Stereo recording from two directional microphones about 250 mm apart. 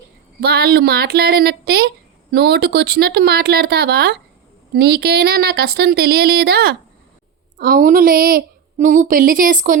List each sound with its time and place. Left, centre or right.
0.4 s a woman's voice: right